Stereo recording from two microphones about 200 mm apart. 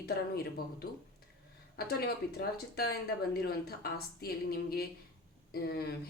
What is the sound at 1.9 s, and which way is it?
A woman's voice, 50° left (ahead or behind).